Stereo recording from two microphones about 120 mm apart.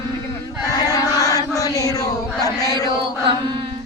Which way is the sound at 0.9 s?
30° left (ahead or behind).